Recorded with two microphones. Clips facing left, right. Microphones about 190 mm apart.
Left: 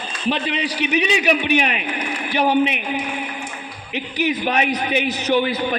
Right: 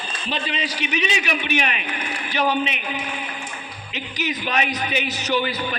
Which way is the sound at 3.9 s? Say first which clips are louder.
Left 6 dB; 60° left (ahead or behind).